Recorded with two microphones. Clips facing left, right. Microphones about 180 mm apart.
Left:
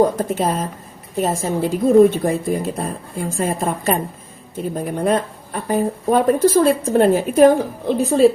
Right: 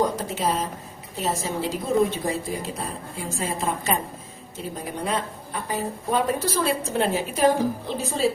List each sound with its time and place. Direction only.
0.0 s a woman's voice: 50° left (ahead or behind)